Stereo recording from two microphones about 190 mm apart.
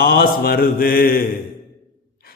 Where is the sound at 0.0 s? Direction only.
50° left (ahead or behind).